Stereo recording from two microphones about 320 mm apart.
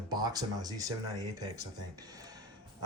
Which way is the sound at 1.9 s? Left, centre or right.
Centre.